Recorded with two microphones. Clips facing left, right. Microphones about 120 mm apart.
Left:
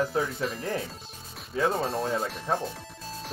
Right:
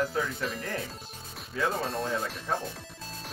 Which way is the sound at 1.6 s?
25° left (ahead or behind).